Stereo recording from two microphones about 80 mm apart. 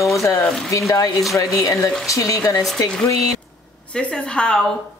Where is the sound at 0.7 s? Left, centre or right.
Left.